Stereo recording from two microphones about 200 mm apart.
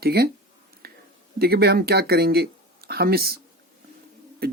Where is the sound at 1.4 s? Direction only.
50° right (ahead or behind).